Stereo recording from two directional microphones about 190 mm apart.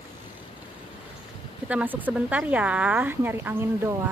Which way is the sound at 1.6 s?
10° right (ahead or behind).